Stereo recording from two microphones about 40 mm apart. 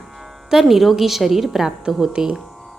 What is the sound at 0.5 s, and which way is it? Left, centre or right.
A woman's voice, centre.